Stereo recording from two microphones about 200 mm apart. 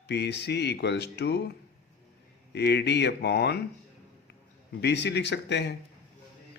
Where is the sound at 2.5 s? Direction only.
55° left (ahead or behind).